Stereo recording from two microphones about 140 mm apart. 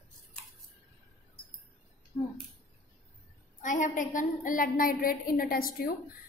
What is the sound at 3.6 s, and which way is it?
A woman's voice, 65° left (ahead or behind).